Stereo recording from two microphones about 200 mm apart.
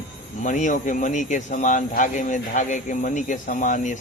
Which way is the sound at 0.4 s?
40° left (ahead or behind).